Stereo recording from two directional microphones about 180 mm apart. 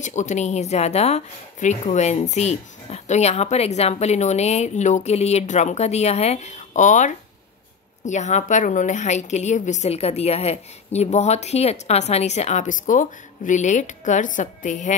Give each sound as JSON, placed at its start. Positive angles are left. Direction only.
{"t": 0.0, "sound": "speech", "side_deg": 40}